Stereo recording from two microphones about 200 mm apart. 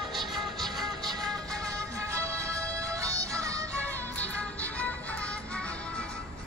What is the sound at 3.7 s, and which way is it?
Music, 10° left (ahead or behind).